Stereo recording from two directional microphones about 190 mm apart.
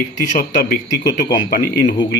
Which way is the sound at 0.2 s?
40° left (ahead or behind).